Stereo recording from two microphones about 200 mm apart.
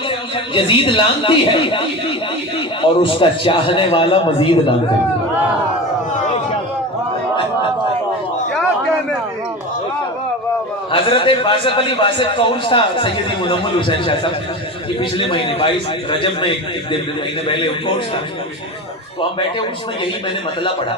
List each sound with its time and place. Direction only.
0.5 s a man's voice: 25° left (ahead or behind)
10.9 s a man's voice: 25° left (ahead or behind)
19.2 s a man's voice: 25° left (ahead or behind)